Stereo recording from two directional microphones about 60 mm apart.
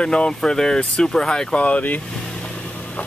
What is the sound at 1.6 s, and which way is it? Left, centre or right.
Speech, left.